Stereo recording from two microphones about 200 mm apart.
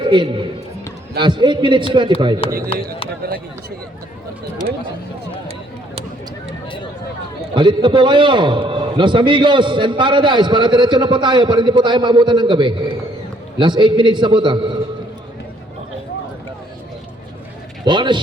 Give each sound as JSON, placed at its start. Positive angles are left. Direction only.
{"t": 0.0, "sound": "a man's voice", "side_deg": -25}
{"t": 2.4, "sound": "speech", "side_deg": 25}
{"t": 3.2, "sound": "speech", "side_deg": -50}
{"t": 7.5, "sound": "a man's voice", "side_deg": -25}
{"t": 17.8, "sound": "a man's voice", "side_deg": -25}